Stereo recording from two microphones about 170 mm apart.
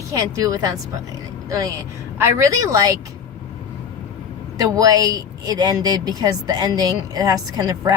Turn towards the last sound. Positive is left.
turn(degrees=-20)  # may be behind; listen again after turning